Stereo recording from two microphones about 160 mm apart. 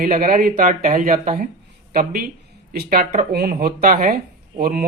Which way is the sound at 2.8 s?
60° right (ahead or behind).